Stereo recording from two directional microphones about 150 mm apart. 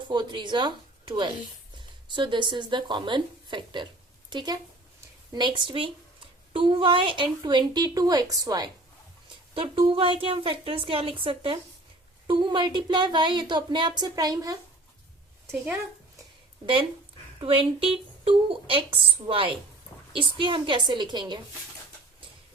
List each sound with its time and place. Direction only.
0.1 s a woman's voice: 30° right (ahead or behind)
9.6 s speech: 35° right (ahead or behind)
17.4 s speech: 35° right (ahead or behind)